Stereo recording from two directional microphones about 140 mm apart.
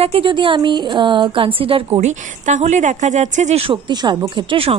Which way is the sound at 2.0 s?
60° right (ahead or behind).